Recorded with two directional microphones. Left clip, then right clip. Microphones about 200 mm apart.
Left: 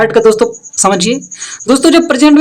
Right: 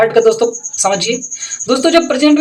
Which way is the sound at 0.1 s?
50° left (ahead or behind).